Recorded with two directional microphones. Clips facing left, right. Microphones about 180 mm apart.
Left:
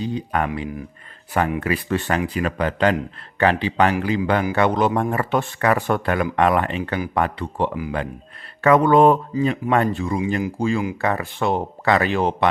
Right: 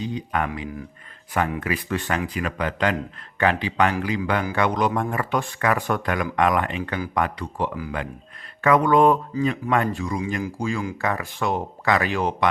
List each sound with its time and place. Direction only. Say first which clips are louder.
0.0 s speech: left 3 dB; 35° left (ahead or behind)